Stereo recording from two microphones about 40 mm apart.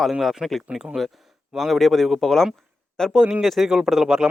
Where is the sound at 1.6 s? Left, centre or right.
Centre.